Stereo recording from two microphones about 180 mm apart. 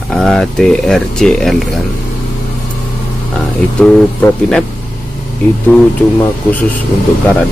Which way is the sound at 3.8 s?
5° left (ahead or behind).